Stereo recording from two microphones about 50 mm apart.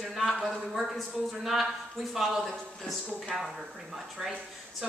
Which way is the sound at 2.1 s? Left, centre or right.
Centre.